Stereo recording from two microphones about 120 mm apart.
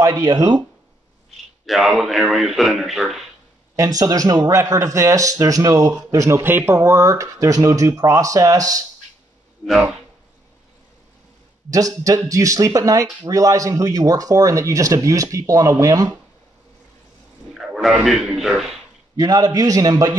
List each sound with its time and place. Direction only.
0.0 s a man's voice: 30° right (ahead or behind)
1.7 s a man's voice: centre (ahead or behind)
3.7 s speech: 25° right (ahead or behind)
11.7 s speech: 30° right (ahead or behind)
17.6 s a man's voice: 10° right (ahead or behind)
19.1 s a man's voice: 30° right (ahead or behind)